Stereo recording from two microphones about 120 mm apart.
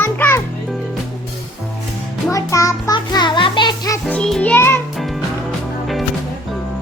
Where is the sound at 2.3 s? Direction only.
25° left (ahead or behind).